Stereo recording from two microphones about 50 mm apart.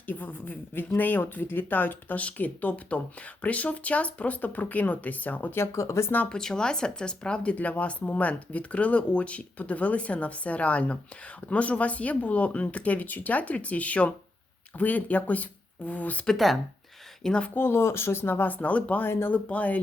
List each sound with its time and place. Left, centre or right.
0.0 s speech: left
5.7 s speech: left
6.2 s speech: centre
7.5 s speech: left
16.2 s speech: centre
17.5 s speech: left